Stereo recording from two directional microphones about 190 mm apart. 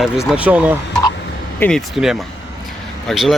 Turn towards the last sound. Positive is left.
turn(degrees=0)  # may be behind; listen again after turning